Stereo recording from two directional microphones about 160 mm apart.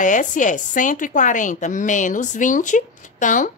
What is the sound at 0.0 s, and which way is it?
Speech, 50° left (ahead or behind).